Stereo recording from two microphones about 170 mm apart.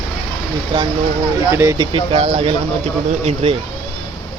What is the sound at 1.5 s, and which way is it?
Speech, 15° right (ahead or behind).